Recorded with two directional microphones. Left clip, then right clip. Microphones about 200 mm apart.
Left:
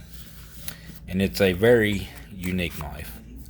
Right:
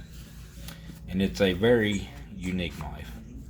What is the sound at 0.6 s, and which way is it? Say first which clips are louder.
Speech: left 4 dB; 55° left (ahead or behind).